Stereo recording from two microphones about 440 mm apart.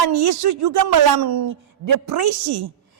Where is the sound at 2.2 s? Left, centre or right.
Right.